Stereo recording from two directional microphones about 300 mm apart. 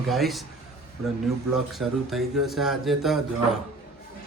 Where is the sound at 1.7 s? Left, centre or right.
Centre.